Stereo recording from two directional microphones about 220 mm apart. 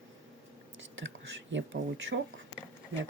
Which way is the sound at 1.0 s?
60° right (ahead or behind).